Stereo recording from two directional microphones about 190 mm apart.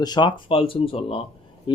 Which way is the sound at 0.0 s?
25° left (ahead or behind).